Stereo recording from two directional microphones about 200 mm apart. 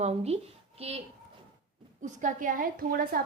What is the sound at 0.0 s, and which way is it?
Speech, 30° right (ahead or behind).